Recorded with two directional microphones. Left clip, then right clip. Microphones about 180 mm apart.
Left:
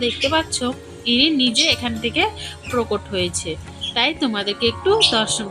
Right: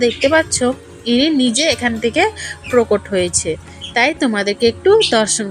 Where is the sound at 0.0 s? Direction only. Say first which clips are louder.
Right 6 dB; 25° right (ahead or behind).